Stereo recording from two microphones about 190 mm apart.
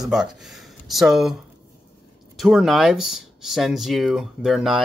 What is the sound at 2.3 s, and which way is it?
Speech, centre (ahead or behind).